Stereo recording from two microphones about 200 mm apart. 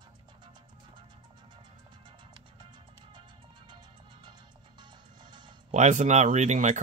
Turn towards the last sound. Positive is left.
turn(degrees=-35)  # may be behind; listen again after turning